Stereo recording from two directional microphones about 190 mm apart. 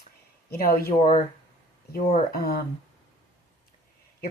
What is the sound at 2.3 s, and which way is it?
Speech, 50° left (ahead or behind).